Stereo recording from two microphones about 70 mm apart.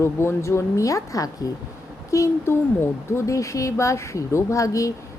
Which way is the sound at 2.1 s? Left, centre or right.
Left.